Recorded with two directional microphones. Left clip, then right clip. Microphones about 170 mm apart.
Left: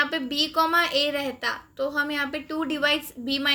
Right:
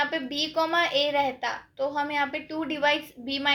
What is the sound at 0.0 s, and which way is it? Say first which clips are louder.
A woman's voice: left 3 dB; 35° left (ahead or behind).